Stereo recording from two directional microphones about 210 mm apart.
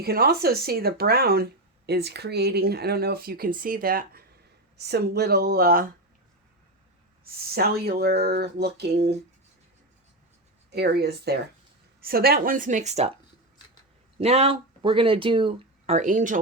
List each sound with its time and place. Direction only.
0.0 s speech: 50° right (ahead or behind)
7.3 s speech: 45° right (ahead or behind)
10.7 s speech: 50° right (ahead or behind); by 13.1 s 30° right (ahead or behind)
14.2 s speech: 30° right (ahead or behind)